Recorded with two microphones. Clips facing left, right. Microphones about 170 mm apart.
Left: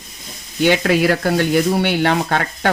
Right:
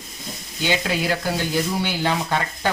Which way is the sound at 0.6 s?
60° left (ahead or behind).